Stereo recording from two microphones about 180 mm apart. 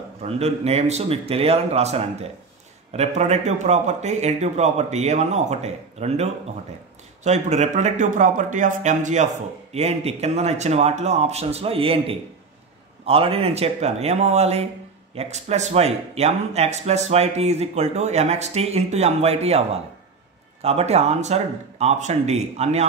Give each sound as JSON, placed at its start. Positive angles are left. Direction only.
{"t": 0.2, "sound": "a man's voice", "side_deg": -35}